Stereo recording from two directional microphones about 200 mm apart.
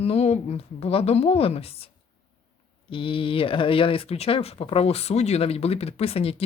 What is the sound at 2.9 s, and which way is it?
Speech, 25° left (ahead or behind).